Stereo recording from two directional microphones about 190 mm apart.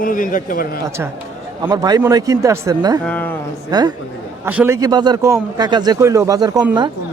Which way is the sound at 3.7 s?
20° right (ahead or behind).